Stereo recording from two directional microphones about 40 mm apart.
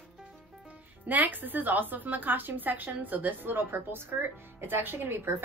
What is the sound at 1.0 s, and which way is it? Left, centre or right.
A woman's voice, right.